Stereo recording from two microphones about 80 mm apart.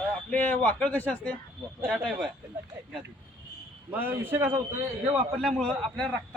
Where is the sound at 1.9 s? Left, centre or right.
Centre.